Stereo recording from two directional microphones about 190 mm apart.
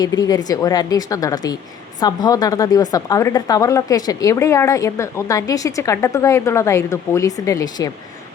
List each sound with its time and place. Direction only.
0.0 s speech: 20° left (ahead or behind)